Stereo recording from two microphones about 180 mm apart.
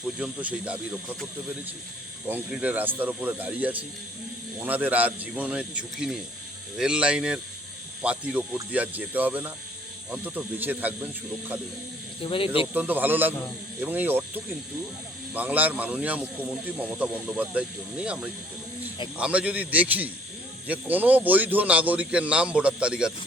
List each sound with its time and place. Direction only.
0.2 s speech: 5° right (ahead or behind)
2.3 s speech: 10° right (ahead or behind)
12.2 s speech: 30° left (ahead or behind)
12.7 s speech: 10° right (ahead or behind)